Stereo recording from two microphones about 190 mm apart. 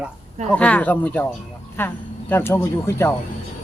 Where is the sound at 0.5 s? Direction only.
5° left (ahead or behind).